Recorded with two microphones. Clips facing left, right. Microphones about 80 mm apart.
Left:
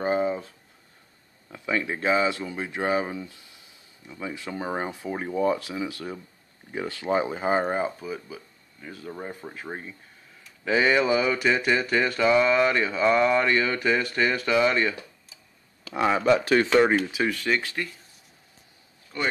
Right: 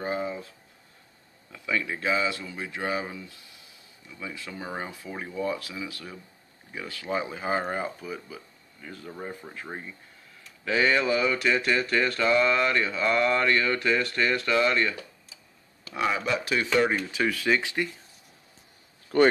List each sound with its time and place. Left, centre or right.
0.0 s a sound: left
1.5 s speech: left; by 15.0 s centre
15.9 s speech: left
16.2 s speech: left
17.3 s speech: centre
17.6 s speech: centre
19.1 s speech: right